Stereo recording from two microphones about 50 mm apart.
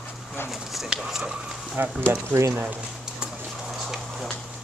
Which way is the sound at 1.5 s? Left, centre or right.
Centre.